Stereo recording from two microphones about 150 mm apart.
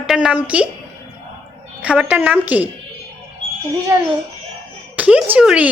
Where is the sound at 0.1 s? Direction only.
5° right (ahead or behind).